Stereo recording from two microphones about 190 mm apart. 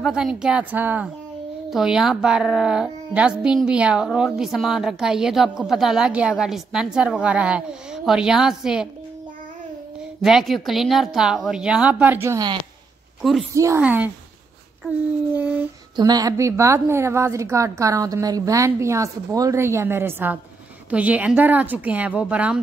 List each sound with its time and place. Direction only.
0.0 s speech: 5° right (ahead or behind)
10.2 s speech: centre (ahead or behind); by 12.5 s 15° right (ahead or behind)
13.2 s speech: centre (ahead or behind)
13.6 s a woman's voice: 10° right (ahead or behind)
15.3 s a woman's voice: 10° right (ahead or behind)
16.0 s a woman's voice: 20° right (ahead or behind)